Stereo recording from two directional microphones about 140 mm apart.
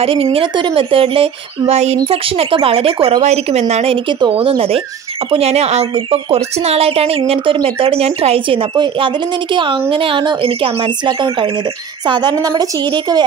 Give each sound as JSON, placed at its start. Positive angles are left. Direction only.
{"t": 0.0, "sound": "speech", "side_deg": -40}